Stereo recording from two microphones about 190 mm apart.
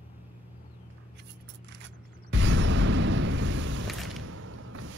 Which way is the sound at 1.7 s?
75° right (ahead or behind).